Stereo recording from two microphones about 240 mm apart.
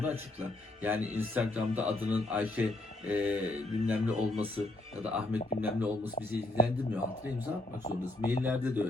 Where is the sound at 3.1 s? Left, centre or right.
Centre.